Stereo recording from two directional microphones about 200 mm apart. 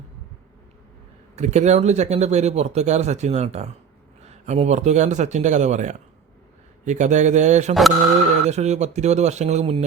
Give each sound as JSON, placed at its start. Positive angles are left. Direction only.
{"t": 1.4, "sound": "speech", "side_deg": -35}
{"t": 7.7, "sound": "speech", "side_deg": 0}
{"t": 8.4, "sound": "speech", "side_deg": -35}